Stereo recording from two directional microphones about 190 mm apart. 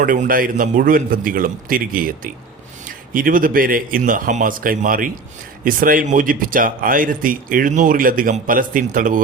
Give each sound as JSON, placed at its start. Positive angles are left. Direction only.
{"t": 0.0, "sound": "speech", "side_deg": -45}